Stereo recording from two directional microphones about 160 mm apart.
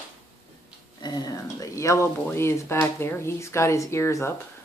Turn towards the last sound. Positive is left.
turn(degrees=15)  # may be behind; listen again after turning